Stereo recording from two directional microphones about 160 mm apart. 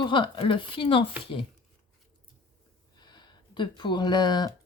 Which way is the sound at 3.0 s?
25° left (ahead or behind).